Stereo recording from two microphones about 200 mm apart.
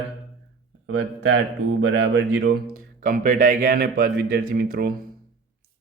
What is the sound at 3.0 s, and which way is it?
Speech, 40° right (ahead or behind).